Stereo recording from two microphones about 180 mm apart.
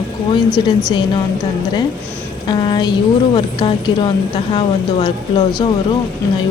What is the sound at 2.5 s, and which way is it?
Speech, 25° left (ahead or behind).